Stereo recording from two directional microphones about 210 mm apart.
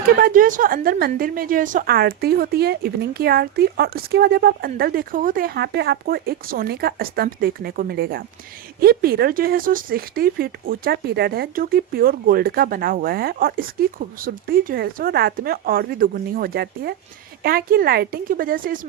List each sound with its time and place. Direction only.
0.0 s speech: 45° right (ahead or behind)